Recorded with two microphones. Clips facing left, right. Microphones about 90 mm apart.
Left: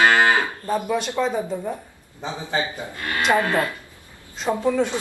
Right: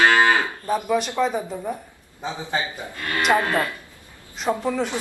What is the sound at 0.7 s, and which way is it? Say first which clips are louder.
Speech: right 1 dB; 5° right (ahead or behind).